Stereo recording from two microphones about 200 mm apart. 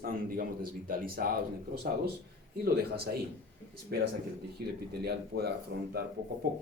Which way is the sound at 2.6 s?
50° right (ahead or behind).